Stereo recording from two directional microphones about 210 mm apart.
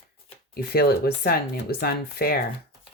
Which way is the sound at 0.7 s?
45° left (ahead or behind).